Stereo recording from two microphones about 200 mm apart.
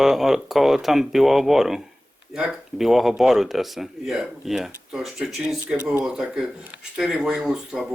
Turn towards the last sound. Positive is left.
turn(degrees=-5)  # may be behind; listen again after turning